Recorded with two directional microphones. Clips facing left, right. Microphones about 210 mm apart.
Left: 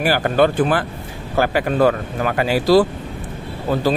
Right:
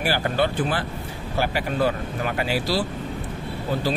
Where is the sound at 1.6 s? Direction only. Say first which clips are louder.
Left 8 dB; 90° left.